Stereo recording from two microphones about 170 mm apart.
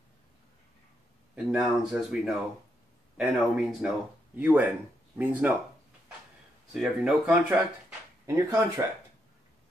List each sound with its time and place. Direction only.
1.3 s speech: 5° right (ahead or behind)
6.7 s speech: 5° right (ahead or behind)
8.4 s speech: 20° right (ahead or behind)